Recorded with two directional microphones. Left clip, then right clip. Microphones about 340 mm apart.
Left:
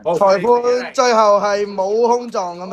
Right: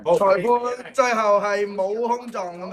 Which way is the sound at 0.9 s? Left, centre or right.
Centre.